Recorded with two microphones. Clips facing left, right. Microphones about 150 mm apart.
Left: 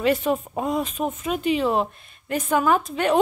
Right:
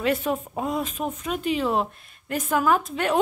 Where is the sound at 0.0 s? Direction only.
Centre (ahead or behind).